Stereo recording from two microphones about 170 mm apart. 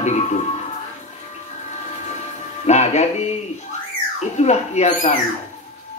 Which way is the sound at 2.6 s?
40° left (ahead or behind).